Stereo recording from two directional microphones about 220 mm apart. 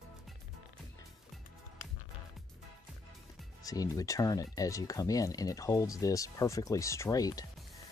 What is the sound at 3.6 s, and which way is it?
Speech, 15° left (ahead or behind).